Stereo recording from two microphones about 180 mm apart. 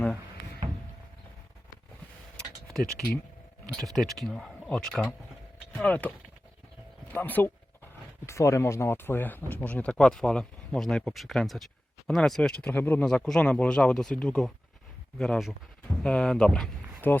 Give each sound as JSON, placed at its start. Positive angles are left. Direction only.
{"t": 2.3, "sound": "tick-tock", "side_deg": 5}
{"t": 3.7, "sound": "speech", "side_deg": 5}